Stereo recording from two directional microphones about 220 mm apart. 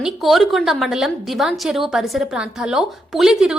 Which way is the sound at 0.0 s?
Centre (ahead or behind).